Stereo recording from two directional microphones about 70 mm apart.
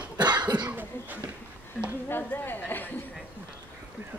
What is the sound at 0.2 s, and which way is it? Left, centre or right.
Cough, right.